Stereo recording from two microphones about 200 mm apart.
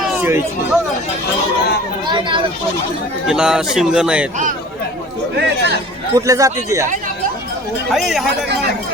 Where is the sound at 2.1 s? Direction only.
25° right (ahead or behind).